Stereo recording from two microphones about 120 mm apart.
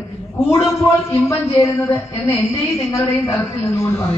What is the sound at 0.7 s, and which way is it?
Speech, 25° left (ahead or behind).